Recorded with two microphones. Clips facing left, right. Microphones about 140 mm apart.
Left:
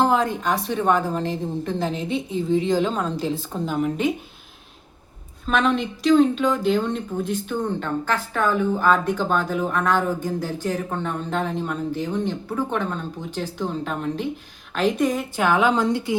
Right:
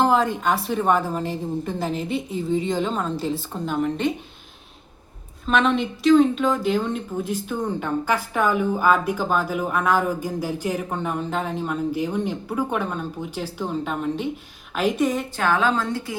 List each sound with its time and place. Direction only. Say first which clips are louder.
0.0 s a woman's voice: right 1 dB; centre (ahead or behind)
5.5 s a woman's voice: right 1 dB; centre (ahead or behind)
15.4 s a woman's voice: left 3 dB; 15° left (ahead or behind)